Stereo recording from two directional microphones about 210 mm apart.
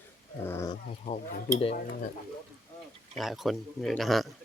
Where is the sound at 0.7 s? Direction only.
35° left (ahead or behind).